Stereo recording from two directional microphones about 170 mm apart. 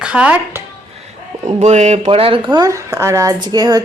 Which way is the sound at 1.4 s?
40° right (ahead or behind).